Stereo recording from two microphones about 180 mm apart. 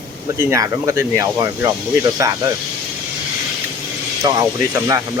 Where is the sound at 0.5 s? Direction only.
20° right (ahead or behind).